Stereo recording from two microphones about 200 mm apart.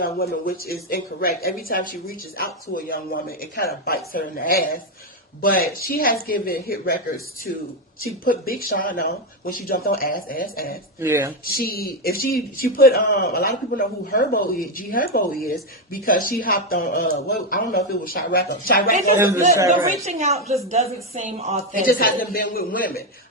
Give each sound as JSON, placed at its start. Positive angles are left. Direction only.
{"t": 0.0, "sound": "speech", "side_deg": 45}
{"t": 8.0, "sound": "speech", "side_deg": 45}
{"t": 11.0, "sound": "speech", "side_deg": -15}
{"t": 11.4, "sound": "speech", "side_deg": 50}
{"t": 19.9, "sound": "speech", "side_deg": -35}
{"t": 21.8, "sound": "speech", "side_deg": 45}